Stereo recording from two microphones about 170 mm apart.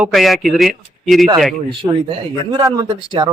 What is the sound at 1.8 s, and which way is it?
Speech, 30° right (ahead or behind).